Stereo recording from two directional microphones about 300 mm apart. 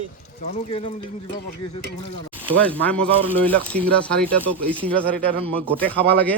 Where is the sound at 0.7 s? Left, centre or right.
Centre.